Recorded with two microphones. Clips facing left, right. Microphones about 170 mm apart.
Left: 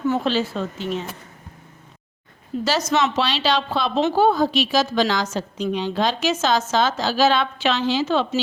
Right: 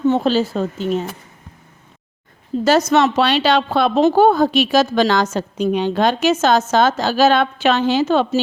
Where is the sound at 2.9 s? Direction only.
60° right (ahead or behind).